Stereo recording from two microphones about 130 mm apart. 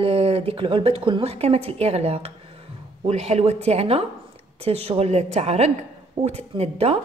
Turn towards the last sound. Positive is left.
turn(degrees=-50)  # may be behind; listen again after turning